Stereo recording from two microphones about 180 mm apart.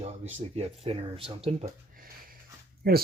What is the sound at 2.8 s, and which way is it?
Speech, 60° right (ahead or behind).